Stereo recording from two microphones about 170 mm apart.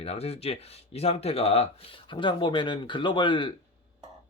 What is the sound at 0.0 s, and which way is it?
Speech, 35° left (ahead or behind).